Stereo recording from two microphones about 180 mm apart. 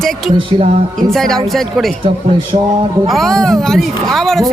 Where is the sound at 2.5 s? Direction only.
35° right (ahead or behind).